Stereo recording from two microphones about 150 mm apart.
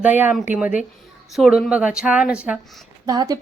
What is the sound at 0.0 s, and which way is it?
Speech, 10° right (ahead or behind).